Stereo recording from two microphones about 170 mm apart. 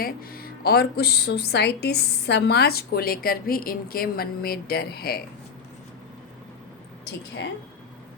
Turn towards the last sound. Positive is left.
turn(degrees=90)